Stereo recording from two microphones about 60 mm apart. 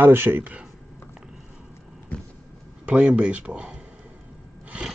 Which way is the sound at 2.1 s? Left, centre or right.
Left.